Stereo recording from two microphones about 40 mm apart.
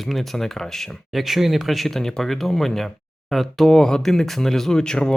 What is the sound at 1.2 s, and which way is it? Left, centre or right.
Speech, centre.